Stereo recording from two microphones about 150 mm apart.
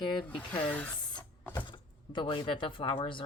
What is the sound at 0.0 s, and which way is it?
Speech, 30° left (ahead or behind).